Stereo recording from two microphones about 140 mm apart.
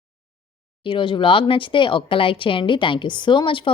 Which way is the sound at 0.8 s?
35° left (ahead or behind).